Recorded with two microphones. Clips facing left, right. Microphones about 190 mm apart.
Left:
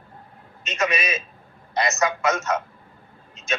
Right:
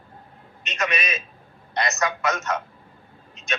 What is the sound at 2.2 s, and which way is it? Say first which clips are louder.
Speech: left 3 dB; 25° left (ahead or behind).